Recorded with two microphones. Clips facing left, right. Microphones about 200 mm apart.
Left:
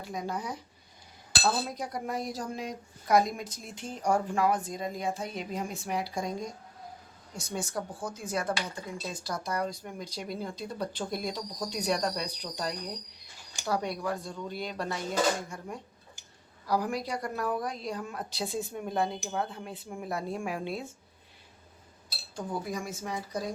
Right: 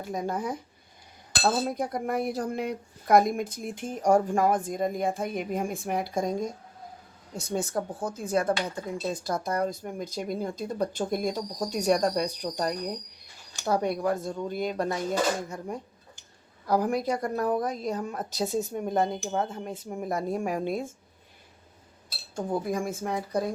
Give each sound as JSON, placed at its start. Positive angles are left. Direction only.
{"t": 0.0, "sound": "speech", "side_deg": -45}
{"t": 7.5, "sound": "speech", "side_deg": -50}
{"t": 16.6, "sound": "speech", "side_deg": -50}
{"t": 22.4, "sound": "speech", "side_deg": -50}